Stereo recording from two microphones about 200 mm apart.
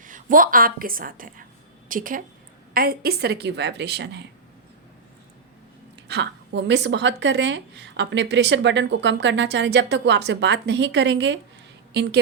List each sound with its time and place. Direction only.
0.0 s a woman's voice: 40° right (ahead or behind); by 4.2 s 55° right (ahead or behind)
6.1 s a woman's voice: 60° right (ahead or behind)